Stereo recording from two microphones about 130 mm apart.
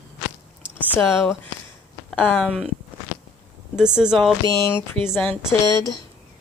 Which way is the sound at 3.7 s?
5° right (ahead or behind).